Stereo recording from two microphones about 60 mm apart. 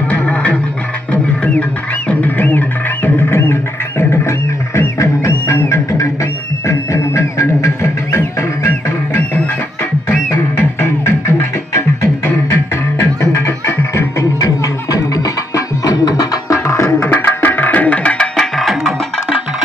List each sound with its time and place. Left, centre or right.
0.1 s music: left
2.0 s music: left
4.1 s music: left
5.3 s music: left
5.7 s music: left
10.6 s music: left
14.4 s music: left
17.1 s tabla: left; by 18.9 s centre